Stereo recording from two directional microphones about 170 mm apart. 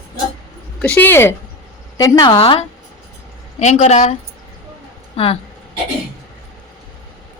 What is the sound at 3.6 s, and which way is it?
Speech, 40° left (ahead or behind).